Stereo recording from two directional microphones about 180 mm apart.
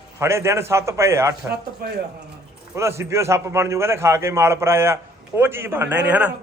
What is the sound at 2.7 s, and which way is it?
A man's voice, 15° right (ahead or behind).